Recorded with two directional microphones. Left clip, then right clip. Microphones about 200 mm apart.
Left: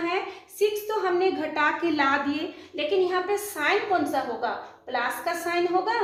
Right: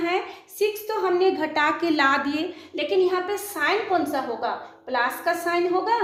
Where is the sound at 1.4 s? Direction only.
45° right (ahead or behind).